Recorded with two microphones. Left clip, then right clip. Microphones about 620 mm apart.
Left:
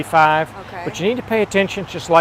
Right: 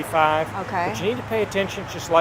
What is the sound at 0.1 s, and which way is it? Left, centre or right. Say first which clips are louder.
Speech: left 6 dB; left.